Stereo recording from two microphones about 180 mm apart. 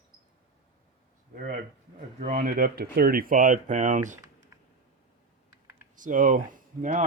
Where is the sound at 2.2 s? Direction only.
50° right (ahead or behind).